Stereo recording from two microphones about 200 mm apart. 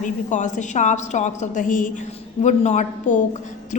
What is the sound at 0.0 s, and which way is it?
A woman's voice, 40° left (ahead or behind).